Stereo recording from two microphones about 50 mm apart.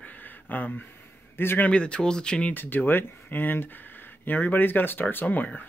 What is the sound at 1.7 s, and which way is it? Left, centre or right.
Speech, left.